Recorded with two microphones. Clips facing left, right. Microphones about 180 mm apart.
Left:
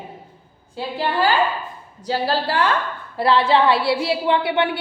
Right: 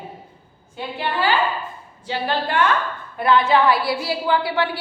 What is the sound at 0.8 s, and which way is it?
A woman's voice, 40° left (ahead or behind).